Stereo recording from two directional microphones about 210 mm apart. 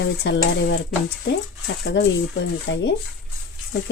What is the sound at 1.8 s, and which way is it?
Speech, 55° left (ahead or behind).